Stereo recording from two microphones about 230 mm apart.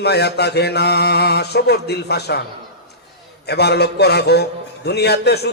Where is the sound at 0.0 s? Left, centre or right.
Left.